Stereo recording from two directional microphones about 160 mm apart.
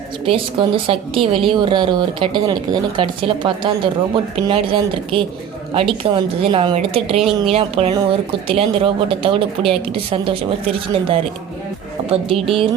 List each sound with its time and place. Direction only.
0.3 s a woman's voice: 35° right (ahead or behind)
7.2 s speech: centre (ahead or behind)
7.5 s a woman's voice: 40° right (ahead or behind)